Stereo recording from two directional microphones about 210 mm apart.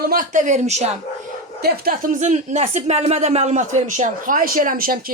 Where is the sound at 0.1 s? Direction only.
40° right (ahead or behind).